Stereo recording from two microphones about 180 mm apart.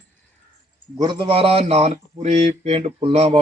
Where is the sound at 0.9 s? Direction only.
25° right (ahead or behind).